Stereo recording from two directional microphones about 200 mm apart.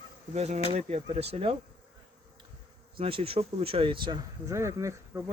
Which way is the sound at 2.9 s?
30° right (ahead or behind).